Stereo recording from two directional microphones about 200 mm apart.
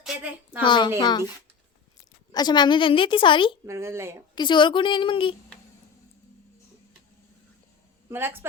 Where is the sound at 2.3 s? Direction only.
20° left (ahead or behind).